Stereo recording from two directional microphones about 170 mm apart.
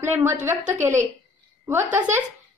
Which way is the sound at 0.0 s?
15° right (ahead or behind).